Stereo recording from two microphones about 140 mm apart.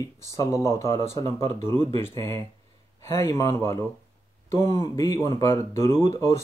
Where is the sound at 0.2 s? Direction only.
20° left (ahead or behind).